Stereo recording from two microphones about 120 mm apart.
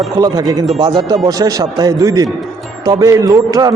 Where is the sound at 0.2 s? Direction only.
35° right (ahead or behind).